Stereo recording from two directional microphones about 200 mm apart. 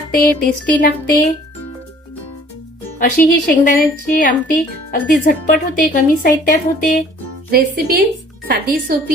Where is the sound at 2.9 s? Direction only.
45° left (ahead or behind).